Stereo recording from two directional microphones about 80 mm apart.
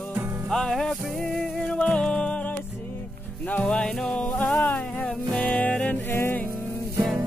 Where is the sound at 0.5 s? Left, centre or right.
Centre.